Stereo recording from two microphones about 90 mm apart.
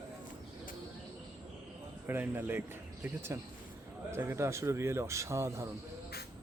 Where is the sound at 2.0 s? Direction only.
25° right (ahead or behind).